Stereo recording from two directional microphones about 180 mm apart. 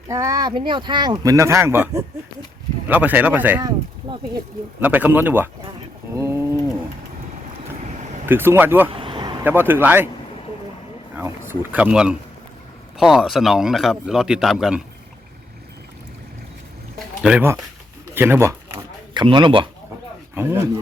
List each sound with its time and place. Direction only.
0.1 s speech: 15° right (ahead or behind)
3.6 s a sound: 20° right (ahead or behind)
4.8 s speech: 10° right (ahead or behind)
6.1 s pigeon: 15° right (ahead or behind)
8.3 s speech: 10° right (ahead or behind)
8.9 s vehicle: 30° right (ahead or behind)
9.4 s speech: 10° right (ahead or behind)
11.1 s speech: 15° right (ahead or behind)
17.2 s speech: 10° right (ahead or behind)
19.1 s speech: 25° right (ahead or behind)
20.3 s speech: 15° right (ahead or behind)